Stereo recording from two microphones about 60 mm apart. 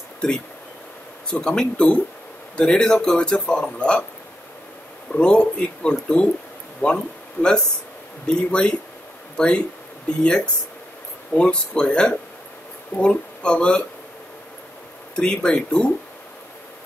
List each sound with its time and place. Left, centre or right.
1.4 s speech: centre
5.1 s speech: centre
10.0 s speech: centre
15.1 s speech: centre